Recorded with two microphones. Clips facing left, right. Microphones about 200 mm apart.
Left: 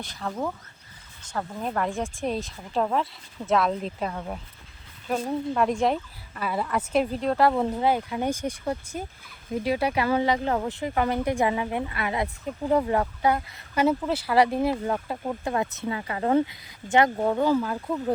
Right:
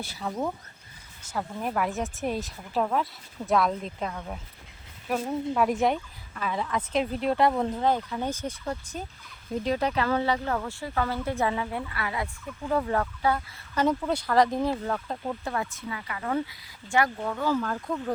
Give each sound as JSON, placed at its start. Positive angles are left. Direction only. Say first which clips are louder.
{"t": 0.0, "sound": "speech", "louder": "even", "side_deg": -5}
{"t": 5.0, "sound": "speech", "louder": "left 1 dB", "side_deg": -5}
{"t": 15.5, "sound": "speech", "louder": "left 5 dB", "side_deg": 25}
{"t": 16.5, "sound": "speech", "louder": "left 5 dB", "side_deg": 20}
{"t": 17.2, "sound": "speech", "louder": "left 8 dB", "side_deg": 35}
{"t": 17.4, "sound": "speech", "louder": "left 4 dB", "side_deg": 10}